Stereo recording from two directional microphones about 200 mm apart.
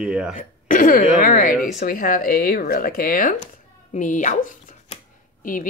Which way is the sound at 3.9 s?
40° left (ahead or behind).